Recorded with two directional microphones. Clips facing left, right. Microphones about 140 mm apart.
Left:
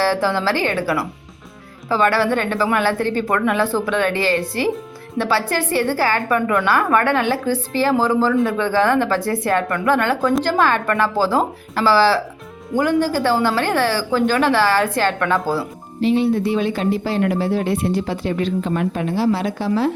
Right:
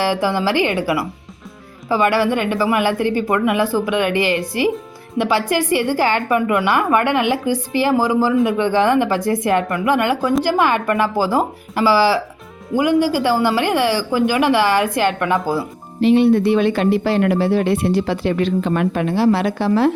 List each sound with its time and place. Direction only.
0.0 s a woman's voice: 15° right (ahead or behind)
16.0 s speech: 65° right (ahead or behind)